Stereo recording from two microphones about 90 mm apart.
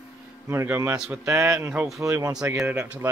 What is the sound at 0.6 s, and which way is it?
Speech, 25° right (ahead or behind).